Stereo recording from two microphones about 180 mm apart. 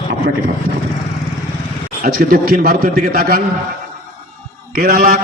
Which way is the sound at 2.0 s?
55° right (ahead or behind).